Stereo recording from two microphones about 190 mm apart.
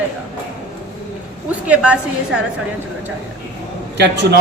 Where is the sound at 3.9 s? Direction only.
60° right (ahead or behind).